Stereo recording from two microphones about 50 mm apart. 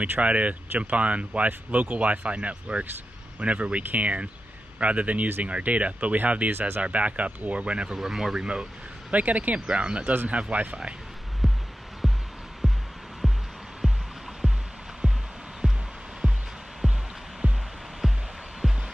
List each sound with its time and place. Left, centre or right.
0.2 s speech: right
7.9 s speech: centre
9.1 s speech: right
9.7 s speech: right
11.4 s music: centre
14.4 s music: centre
16.2 s music: centre
17.4 s music: right
18.0 s music: centre